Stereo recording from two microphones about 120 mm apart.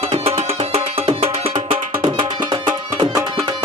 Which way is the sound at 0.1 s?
55° right (ahead or behind).